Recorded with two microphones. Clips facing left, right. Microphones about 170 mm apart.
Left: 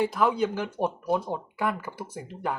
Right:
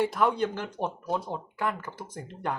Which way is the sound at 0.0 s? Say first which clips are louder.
Left 1 dB; centre (ahead or behind).